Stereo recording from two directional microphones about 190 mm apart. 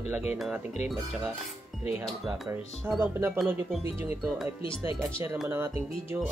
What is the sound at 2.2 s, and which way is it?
Speech, centre (ahead or behind).